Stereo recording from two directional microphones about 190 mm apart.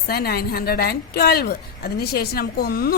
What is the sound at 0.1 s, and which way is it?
A woman's voice, 55° left (ahead or behind).